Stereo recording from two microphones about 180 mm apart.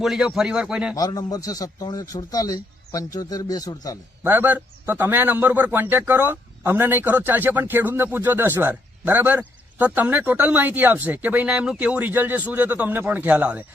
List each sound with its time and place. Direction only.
0.0 s speech: centre (ahead or behind)
0.9 s a man's voice: 20° left (ahead or behind)
4.2 s a man's voice: 10° right (ahead or behind)